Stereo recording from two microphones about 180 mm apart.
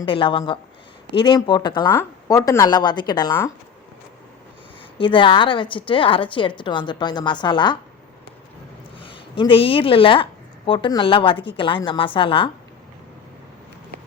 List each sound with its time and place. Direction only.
0.0 s a woman's voice: 30° left (ahead or behind)
4.9 s a woman's voice: 30° left (ahead or behind)
9.0 s a woman's voice: 30° left (ahead or behind)